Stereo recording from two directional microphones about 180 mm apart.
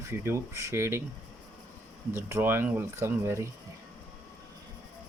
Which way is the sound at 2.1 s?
10° right (ahead or behind).